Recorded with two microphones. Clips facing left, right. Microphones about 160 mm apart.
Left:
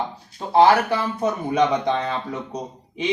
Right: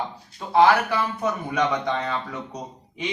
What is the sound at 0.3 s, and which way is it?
Speech, 30° left (ahead or behind).